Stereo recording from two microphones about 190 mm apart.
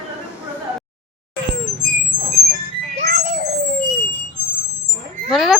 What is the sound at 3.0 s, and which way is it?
Music, 45° right (ahead or behind).